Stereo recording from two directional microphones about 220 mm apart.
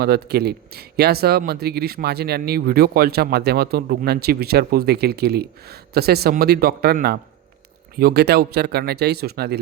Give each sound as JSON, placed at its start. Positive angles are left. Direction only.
{"t": 0.0, "sound": "speech", "side_deg": -45}